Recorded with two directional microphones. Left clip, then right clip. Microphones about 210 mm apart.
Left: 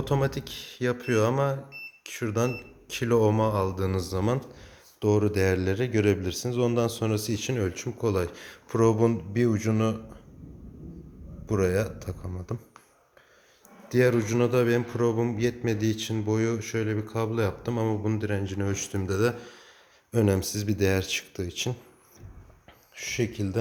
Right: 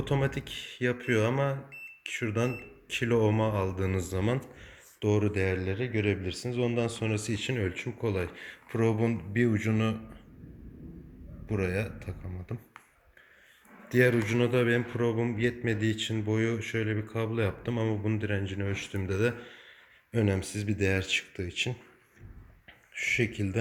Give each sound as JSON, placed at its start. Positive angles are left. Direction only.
{"t": 0.0, "sound": "a man's voice", "side_deg": 5}
{"t": 5.4, "sound": "speech", "side_deg": 20}
{"t": 11.4, "sound": "speech", "side_deg": 20}
{"t": 14.1, "sound": "a man's voice", "side_deg": 5}
{"t": 23.0, "sound": "a man's voice", "side_deg": 0}